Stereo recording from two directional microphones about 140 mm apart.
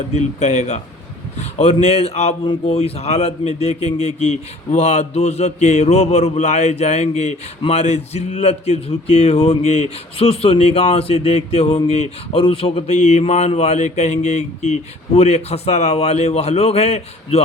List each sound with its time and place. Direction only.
0.1 s speech: 50° left (ahead or behind)